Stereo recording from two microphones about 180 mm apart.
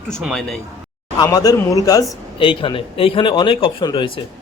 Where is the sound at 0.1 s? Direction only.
Centre (ahead or behind).